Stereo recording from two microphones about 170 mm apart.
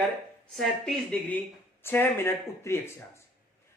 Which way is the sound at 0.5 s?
5° left (ahead or behind).